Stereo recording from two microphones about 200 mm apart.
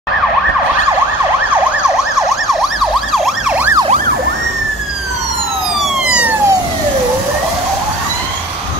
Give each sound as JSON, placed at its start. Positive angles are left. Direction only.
{"t": 2.1, "sound": "emergency vehicle", "side_deg": 0}
{"t": 5.8, "sound": "police car", "side_deg": -5}